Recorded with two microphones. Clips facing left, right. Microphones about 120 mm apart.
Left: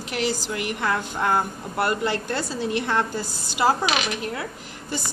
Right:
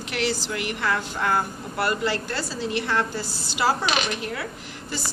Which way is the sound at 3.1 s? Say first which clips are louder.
Left 1 dB; 45° left (ahead or behind).